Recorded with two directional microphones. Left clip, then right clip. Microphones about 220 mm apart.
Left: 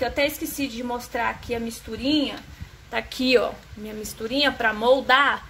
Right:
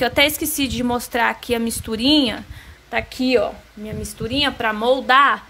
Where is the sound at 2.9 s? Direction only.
10° right (ahead or behind).